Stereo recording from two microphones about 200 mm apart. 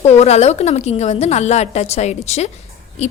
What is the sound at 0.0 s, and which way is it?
A woman's voice, 30° left (ahead or behind).